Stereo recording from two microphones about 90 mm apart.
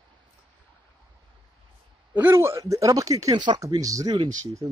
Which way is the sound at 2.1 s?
25° right (ahead or behind).